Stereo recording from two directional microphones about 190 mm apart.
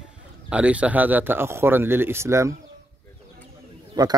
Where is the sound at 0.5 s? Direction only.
5° right (ahead or behind).